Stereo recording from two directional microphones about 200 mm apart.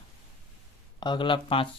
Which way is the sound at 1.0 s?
25° left (ahead or behind).